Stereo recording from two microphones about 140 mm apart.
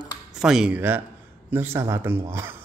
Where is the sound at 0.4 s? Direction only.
5° right (ahead or behind).